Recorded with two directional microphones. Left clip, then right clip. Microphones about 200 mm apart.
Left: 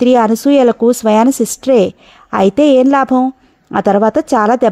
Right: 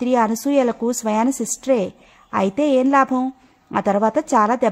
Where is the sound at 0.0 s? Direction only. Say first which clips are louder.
Left 8 dB; 35° left (ahead or behind).